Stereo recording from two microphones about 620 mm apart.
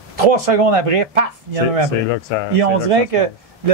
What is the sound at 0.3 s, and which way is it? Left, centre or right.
A man's voice, right.